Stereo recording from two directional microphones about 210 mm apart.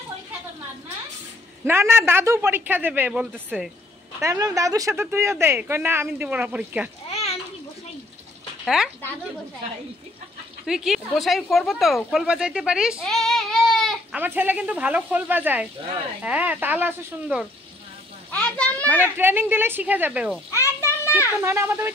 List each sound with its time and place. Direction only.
1.7 s speech: 10° right (ahead or behind)
4.2 s speech: 15° right (ahead or behind)
7.1 s children playing: 30° left (ahead or behind)
8.6 s speech: centre (ahead or behind)
10.7 s speech: centre (ahead or behind)
18.3 s a child's voice: 5° left (ahead or behind)
18.9 s speech: 10° right (ahead or behind)
20.5 s children playing: 15° left (ahead or behind)
21.4 s speech: 10° right (ahead or behind)